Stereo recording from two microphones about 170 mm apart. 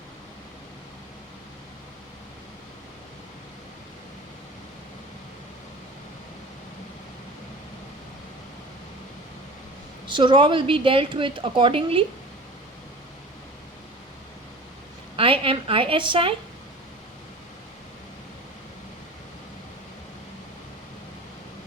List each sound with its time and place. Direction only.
10.1 s a woman's voice: 30° right (ahead or behind)
15.1 s a woman's voice: 30° right (ahead or behind)